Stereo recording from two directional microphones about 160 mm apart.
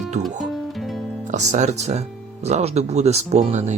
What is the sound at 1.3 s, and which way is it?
Speech, 45° right (ahead or behind).